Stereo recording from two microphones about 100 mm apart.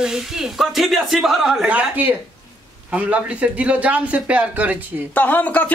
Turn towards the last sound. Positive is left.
turn(degrees=15)  # may be behind; listen again after turning